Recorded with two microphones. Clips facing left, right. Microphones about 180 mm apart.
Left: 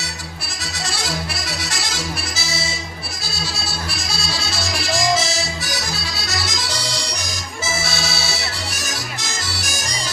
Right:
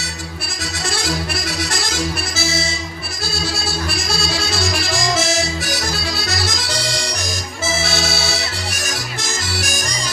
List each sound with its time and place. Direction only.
1.5 s accordion: 50° right (ahead or behind)
5.1 s music: 50° right (ahead or behind)
6.2 s accordion: 55° right (ahead or behind)